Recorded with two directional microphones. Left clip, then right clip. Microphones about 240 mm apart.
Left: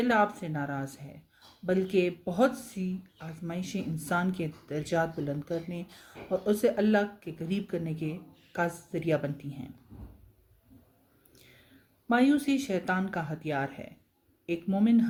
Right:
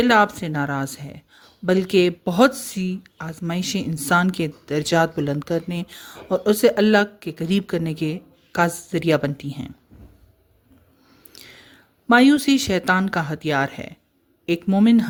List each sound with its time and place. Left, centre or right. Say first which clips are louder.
0.0 s speech: right 10 dB; right
11.3 s a sound: right 15 dB; right
12.0 s speech: right 11 dB; right